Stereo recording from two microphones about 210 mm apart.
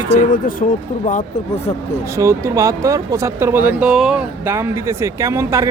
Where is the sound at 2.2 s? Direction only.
15° right (ahead or behind).